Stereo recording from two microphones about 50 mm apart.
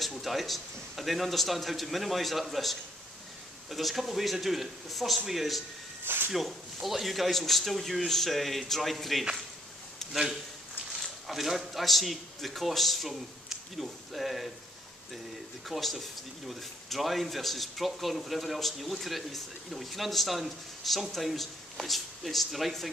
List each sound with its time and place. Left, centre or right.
0.0 s speech: centre
6.0 s a sound: right
6.3 s speech: centre
10.9 s a man's voice: centre
15.7 s speech: centre